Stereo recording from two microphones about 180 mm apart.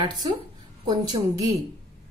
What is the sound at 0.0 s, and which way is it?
A woman's voice, 25° right (ahead or behind).